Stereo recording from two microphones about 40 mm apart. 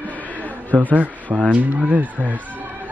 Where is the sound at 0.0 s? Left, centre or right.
Left.